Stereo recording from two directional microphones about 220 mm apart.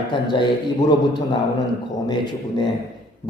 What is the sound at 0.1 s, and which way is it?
A man's voice, 20° left (ahead or behind).